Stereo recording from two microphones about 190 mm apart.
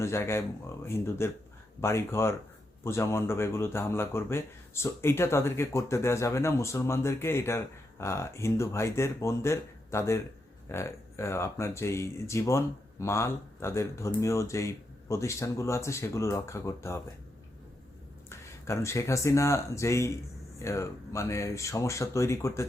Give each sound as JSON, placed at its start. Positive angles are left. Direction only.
{"t": 0.0, "sound": "speech", "side_deg": 15}
{"t": 18.3, "sound": "speech", "side_deg": 15}